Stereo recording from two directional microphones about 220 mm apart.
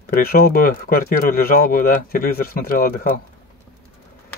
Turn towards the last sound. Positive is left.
turn(degrees=40)  # may be behind; listen again after turning